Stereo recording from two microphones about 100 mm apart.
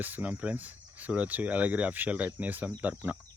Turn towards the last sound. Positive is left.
turn(degrees=-15)  # may be behind; listen again after turning